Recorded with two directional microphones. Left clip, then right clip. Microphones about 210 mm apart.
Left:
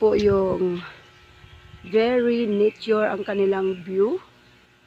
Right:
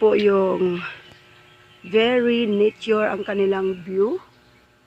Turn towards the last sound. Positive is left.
turn(degrees=0)  # may be behind; listen again after turning